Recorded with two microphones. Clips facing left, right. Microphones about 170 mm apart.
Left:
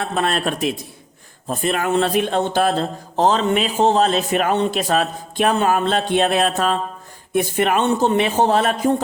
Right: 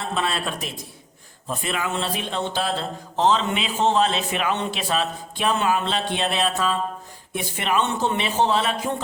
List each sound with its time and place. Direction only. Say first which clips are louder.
0.0 s a man's voice: left 5 dB; 50° left (ahead or behind)